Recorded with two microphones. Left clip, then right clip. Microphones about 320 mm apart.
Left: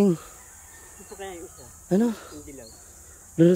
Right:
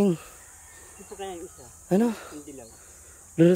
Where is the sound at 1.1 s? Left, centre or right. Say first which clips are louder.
Right 1 dB; right.